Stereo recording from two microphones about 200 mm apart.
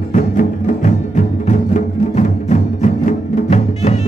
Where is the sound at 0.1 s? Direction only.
40° left (ahead or behind).